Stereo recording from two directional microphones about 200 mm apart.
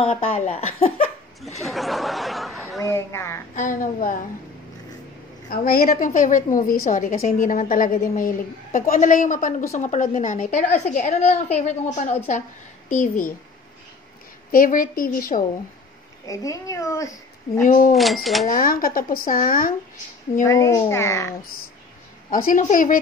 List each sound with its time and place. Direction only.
0.0 s speech: 30° left (ahead or behind)
1.6 s a sound: centre (ahead or behind)
2.9 s speech: 15° left (ahead or behind)
3.5 s a woman's voice: 40° left (ahead or behind)
5.5 s a woman's voice: 45° left (ahead or behind)
14.5 s a woman's voice: 45° left (ahead or behind)
16.3 s speech: 15° left (ahead or behind)
17.6 s a woman's voice: 40° left (ahead or behind)
17.9 s speech: centre (ahead or behind)
18.5 s a woman's voice: 45° left (ahead or behind)
20.4 s speech: 15° left (ahead or behind)
22.3 s a woman's voice: 45° left (ahead or behind)